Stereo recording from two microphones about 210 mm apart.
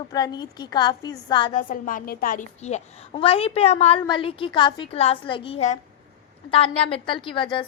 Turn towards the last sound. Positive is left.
turn(degrees=25)  # may be behind; listen again after turning